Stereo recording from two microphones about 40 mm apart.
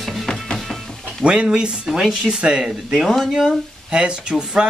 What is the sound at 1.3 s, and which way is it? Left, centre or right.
Speech, right.